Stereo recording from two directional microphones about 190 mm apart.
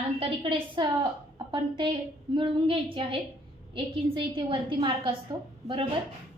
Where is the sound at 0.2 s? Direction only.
30° right (ahead or behind).